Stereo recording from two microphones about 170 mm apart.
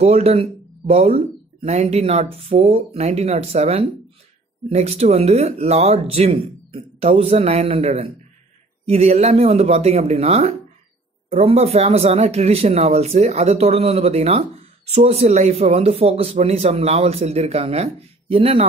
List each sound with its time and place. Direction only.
0.0 s speech: 40° right (ahead or behind)